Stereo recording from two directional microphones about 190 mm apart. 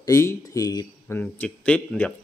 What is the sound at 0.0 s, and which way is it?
Speech, 15° left (ahead or behind).